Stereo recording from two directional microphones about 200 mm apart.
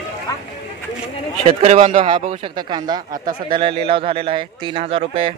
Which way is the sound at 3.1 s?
45° right (ahead or behind).